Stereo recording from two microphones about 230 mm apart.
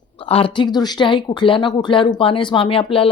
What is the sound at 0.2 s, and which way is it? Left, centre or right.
Speech, left.